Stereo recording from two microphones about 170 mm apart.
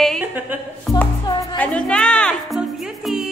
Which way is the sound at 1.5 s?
5° left (ahead or behind).